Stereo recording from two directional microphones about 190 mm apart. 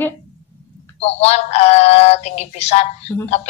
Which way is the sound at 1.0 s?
35° left (ahead or behind).